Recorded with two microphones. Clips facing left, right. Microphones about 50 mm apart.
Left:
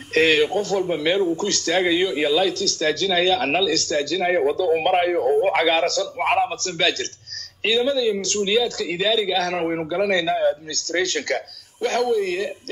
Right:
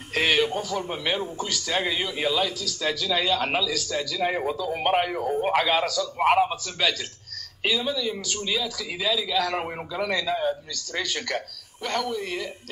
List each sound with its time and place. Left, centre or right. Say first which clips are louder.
0.1 s a man's voice: left 5 dB; centre
1.8 s speech: left 8 dB; centre
2.4 s speech: left 6 dB; centre
4.9 s a man's voice: left 5 dB; centre
5.2 s speech: left 5 dB; centre
6.1 s a man's voice: right 3 dB; centre
6.6 s speech: left 4 dB; centre
9.6 s a man's voice: left 7 dB; centre
10.0 s speech: left 5 dB; centre